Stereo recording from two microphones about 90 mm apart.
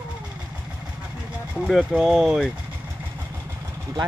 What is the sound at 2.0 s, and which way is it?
Speech, 5° right (ahead or behind).